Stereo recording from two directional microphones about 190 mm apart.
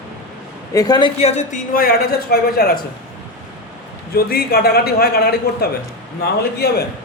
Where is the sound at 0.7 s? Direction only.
20° left (ahead or behind); by 2.8 s 55° left (ahead or behind).